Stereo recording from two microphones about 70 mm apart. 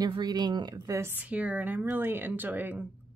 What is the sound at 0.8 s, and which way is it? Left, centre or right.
Speech, right.